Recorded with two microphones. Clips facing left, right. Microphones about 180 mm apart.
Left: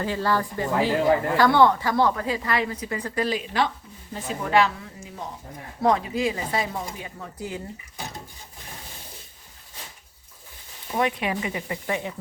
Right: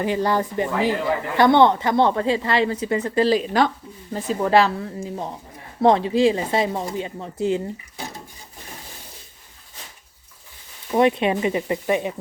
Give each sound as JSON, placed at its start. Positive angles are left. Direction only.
{"t": 0.0, "sound": "a woman's voice", "side_deg": -20}
{"t": 10.9, "sound": "a woman's voice", "side_deg": -25}